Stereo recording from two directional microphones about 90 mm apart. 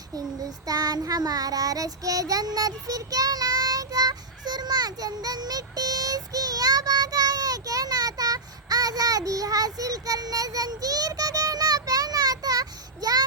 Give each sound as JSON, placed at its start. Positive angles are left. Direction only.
{"t": 0.2, "sound": "child singing", "side_deg": -45}